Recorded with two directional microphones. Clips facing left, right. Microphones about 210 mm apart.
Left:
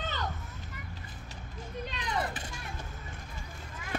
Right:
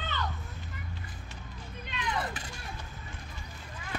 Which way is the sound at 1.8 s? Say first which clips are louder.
Right 1 dB; 35° left (ahead or behind).